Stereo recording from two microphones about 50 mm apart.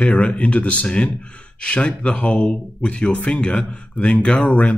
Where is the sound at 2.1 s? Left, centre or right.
Centre.